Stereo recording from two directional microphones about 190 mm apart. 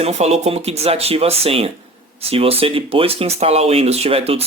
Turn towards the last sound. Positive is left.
turn(degrees=-30)  # may be behind; listen again after turning